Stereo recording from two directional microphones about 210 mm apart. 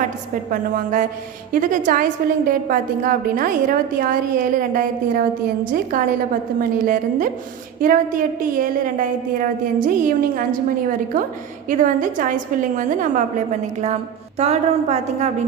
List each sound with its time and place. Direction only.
0.5 s a woman's voice: 40° right (ahead or behind)
11.7 s a woman's voice: 40° right (ahead or behind)